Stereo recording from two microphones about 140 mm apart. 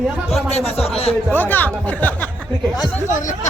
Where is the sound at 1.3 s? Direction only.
15° left (ahead or behind).